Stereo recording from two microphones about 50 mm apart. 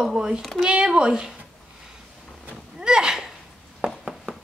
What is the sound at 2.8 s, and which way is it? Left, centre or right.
Speech, centre.